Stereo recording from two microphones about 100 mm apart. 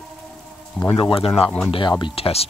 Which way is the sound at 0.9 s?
70° left (ahead or behind).